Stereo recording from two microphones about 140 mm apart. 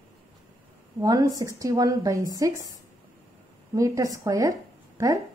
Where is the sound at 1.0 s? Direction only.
25° right (ahead or behind).